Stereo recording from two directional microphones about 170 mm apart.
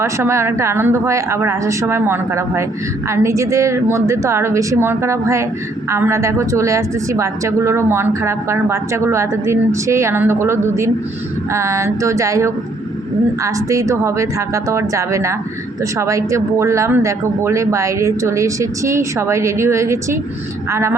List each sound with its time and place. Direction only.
0.0 s a woman's voice: 15° right (ahead or behind)